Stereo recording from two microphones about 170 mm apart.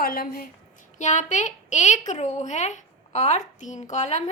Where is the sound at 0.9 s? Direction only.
45° left (ahead or behind).